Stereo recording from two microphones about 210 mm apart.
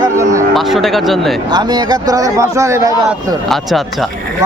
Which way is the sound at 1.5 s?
20° right (ahead or behind).